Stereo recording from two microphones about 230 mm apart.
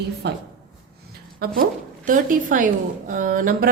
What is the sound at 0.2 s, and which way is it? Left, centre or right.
Speech, right.